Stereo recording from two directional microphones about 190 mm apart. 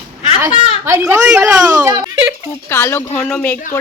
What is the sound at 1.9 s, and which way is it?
Speech, 20° right (ahead or behind).